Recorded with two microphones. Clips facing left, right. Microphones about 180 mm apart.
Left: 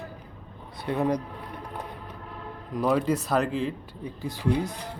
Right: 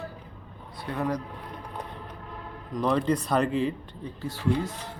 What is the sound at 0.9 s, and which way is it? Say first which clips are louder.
Speech: left 4 dB; 20° left (ahead or behind).